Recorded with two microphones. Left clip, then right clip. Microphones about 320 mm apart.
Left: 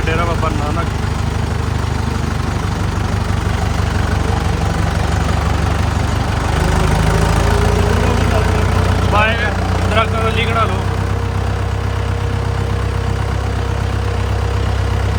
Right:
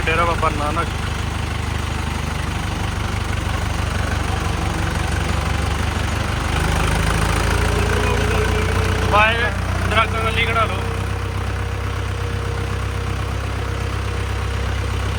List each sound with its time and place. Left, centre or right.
0.1 s vehicle: centre
9.1 s vehicle: centre